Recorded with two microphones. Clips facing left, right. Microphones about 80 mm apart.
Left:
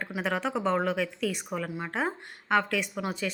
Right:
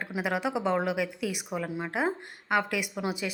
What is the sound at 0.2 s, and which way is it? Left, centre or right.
A woman's voice, centre.